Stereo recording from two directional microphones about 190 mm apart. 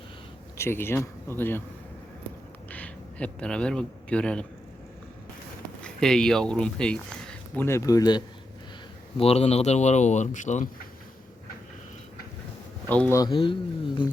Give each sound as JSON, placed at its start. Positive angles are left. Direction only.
{"t": 0.5, "sound": "a man's voice", "side_deg": 15}
{"t": 2.6, "sound": "a man's voice", "side_deg": 5}
{"t": 5.8, "sound": "speech", "side_deg": 5}
{"t": 9.1, "sound": "speech", "side_deg": 30}
{"t": 12.9, "sound": "speech", "side_deg": 10}